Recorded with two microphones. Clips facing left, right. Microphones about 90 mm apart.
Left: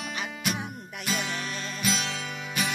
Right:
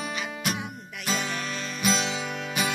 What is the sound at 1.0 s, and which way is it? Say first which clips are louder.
Music: right 2 dB; 5° left (ahead or behind).